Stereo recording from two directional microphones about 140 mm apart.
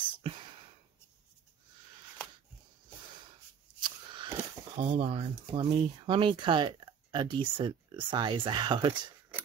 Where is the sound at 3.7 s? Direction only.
35° right (ahead or behind).